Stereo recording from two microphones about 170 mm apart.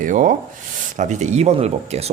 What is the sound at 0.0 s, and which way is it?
Speech, 50° right (ahead or behind).